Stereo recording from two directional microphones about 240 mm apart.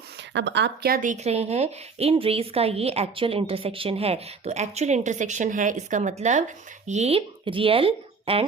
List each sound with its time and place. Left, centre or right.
0.3 s speech: right